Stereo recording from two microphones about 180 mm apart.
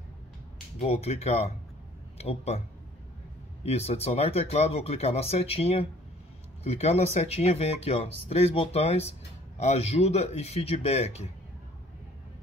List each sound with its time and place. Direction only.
0.7 s speech: 35° left (ahead or behind)
3.6 s speech: 35° left (ahead or behind)